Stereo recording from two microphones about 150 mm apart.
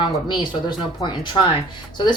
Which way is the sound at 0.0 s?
30° left (ahead or behind).